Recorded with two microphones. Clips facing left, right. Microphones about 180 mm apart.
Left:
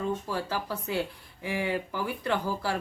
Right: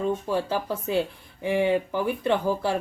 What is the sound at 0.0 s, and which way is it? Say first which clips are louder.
Speech: right 5 dB; 20° right (ahead or behind).